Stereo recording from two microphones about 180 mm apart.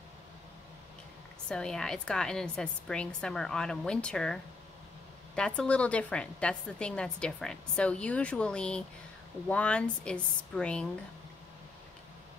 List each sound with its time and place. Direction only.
1.5 s a woman's voice: 5° left (ahead or behind)